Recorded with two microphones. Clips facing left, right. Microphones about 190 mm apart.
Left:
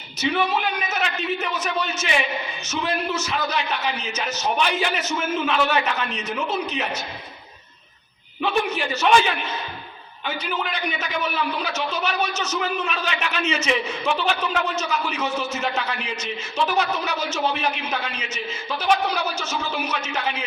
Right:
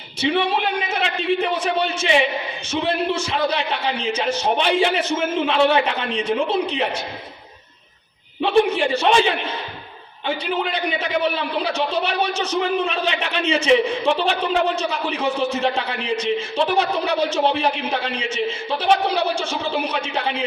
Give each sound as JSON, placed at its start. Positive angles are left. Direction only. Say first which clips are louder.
{"t": 0.2, "sound": "a man's voice", "louder": "right 3 dB", "side_deg": -30}
{"t": 8.4, "sound": "a man's voice", "louder": "right 6 dB", "side_deg": -30}